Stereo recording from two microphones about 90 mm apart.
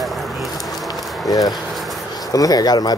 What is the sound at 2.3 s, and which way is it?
Speech, 45° left (ahead or behind).